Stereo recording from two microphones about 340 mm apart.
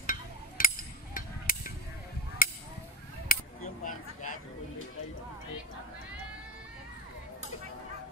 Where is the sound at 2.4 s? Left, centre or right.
Left.